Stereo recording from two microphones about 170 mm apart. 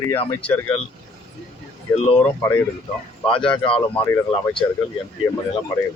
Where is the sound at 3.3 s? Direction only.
30° left (ahead or behind).